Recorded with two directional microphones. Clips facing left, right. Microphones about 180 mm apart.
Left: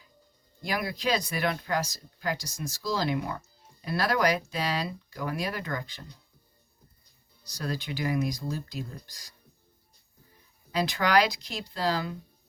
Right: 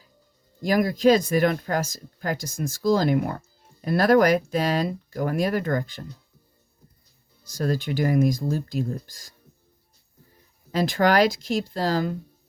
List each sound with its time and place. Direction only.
0.6 s speech: 45° right (ahead or behind)
7.4 s speech: 45° right (ahead or behind)
10.7 s speech: 45° right (ahead or behind)